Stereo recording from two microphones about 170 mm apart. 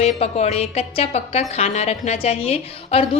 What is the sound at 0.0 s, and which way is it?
A woman's voice, 40° left (ahead or behind).